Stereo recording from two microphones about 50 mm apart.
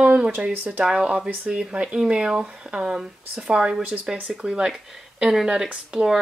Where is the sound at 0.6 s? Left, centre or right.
Right.